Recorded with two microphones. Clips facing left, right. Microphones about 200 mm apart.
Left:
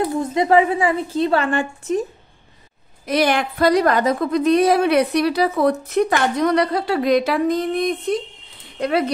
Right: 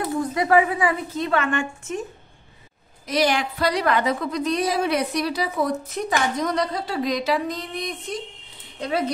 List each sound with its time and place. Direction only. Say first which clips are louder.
0.0 s a woman's voice: left 4 dB; 25° left (ahead or behind)
3.1 s a woman's voice: left 3 dB; 55° left (ahead or behind)
8.7 s speech: left 6 dB; 65° left (ahead or behind)